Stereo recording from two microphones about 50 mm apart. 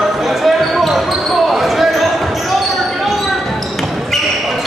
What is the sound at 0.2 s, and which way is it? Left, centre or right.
Basketball bounce, centre.